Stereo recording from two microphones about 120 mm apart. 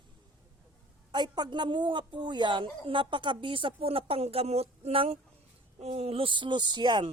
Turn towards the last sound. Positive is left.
turn(degrees=-40)  # may be behind; listen again after turning